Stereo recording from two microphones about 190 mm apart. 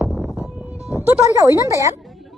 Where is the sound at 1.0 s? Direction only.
15° right (ahead or behind).